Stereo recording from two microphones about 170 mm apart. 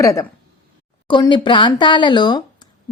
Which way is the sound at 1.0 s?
30° left (ahead or behind).